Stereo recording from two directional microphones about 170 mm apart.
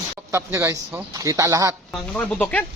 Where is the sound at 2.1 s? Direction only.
5° left (ahead or behind).